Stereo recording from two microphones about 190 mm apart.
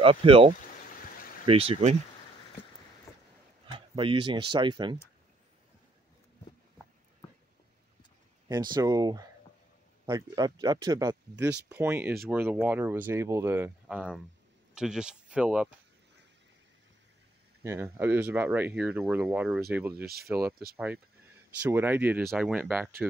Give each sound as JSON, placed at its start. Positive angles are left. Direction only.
{"t": 0.0, "sound": "speech", "side_deg": -30}
{"t": 3.1, "sound": "rowboat", "side_deg": 15}
{"t": 3.7, "sound": "speech", "side_deg": -25}
{"t": 8.5, "sound": "speech", "side_deg": -20}
{"t": 17.6, "sound": "speech", "side_deg": -10}